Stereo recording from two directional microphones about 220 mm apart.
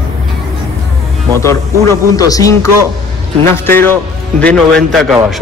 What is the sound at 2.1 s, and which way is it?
Speech, 15° left (ahead or behind).